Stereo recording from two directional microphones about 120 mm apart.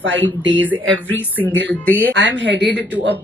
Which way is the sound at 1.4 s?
15° left (ahead or behind).